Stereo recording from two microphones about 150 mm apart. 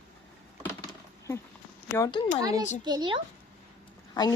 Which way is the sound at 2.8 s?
30° right (ahead or behind).